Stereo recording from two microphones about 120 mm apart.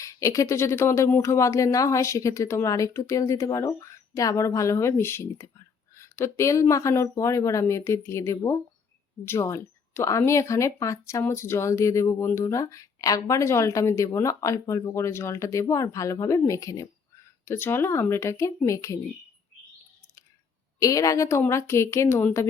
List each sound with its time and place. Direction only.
0.0 s speech: 25° left (ahead or behind)
20.7 s speech: 30° left (ahead or behind)